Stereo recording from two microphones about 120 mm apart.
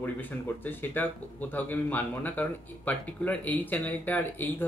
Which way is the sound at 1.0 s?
15° left (ahead or behind).